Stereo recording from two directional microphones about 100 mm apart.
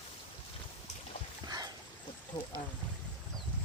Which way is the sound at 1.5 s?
40° right (ahead or behind).